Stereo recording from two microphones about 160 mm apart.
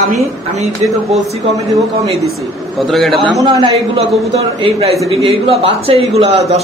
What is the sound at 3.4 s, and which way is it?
A man's voice, 30° right (ahead or behind).